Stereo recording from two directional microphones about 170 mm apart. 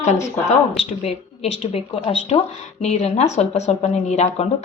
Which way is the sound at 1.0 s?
35° left (ahead or behind).